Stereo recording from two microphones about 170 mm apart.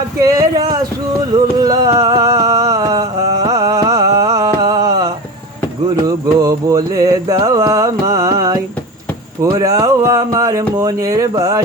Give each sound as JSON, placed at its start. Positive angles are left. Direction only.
{"t": 0.2, "sound": "a sound", "side_deg": -20}
{"t": 6.1, "sound": "music", "side_deg": -20}
{"t": 9.4, "sound": "speech", "side_deg": -20}